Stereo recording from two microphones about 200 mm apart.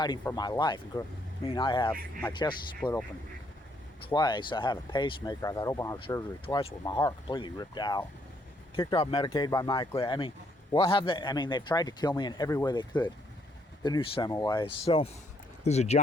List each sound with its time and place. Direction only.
0.0 s speech: 20° left (ahead or behind)
4.1 s speech: 20° left (ahead or behind)
6.4 s speech: 25° left (ahead or behind)